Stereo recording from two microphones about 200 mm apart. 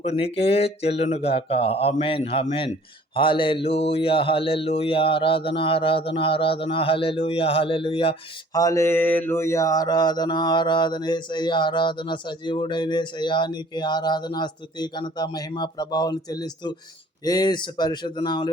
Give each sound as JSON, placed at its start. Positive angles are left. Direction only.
{"t": 0.0, "sound": "mantra", "side_deg": 30}
{"t": 8.5, "sound": "mantra", "side_deg": 15}